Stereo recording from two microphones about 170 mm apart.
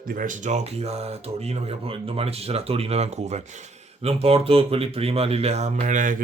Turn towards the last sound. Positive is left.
turn(degrees=-50)  # may be behind; listen again after turning